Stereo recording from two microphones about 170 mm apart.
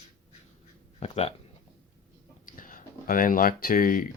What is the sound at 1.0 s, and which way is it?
Speech, 40° left (ahead or behind).